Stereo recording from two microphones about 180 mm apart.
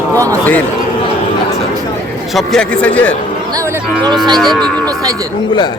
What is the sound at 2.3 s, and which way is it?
Speech, centre (ahead or behind).